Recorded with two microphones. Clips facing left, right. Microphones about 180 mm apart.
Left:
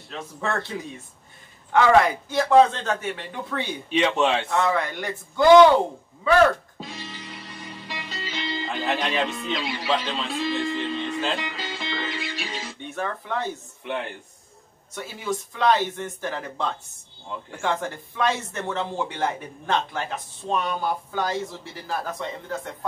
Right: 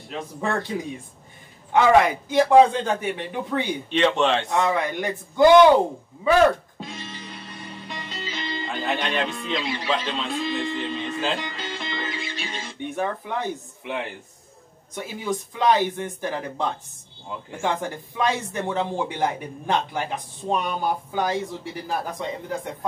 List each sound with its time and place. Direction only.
0.1 s speech: 15° right (ahead or behind)
3.9 s a man's voice: 10° left (ahead or behind)
4.5 s speech: 15° right (ahead or behind)
6.8 s music: centre (ahead or behind)
12.8 s speech: 15° right (ahead or behind)
13.8 s speech: 5° right (ahead or behind)
15.0 s speech: 15° right (ahead or behind)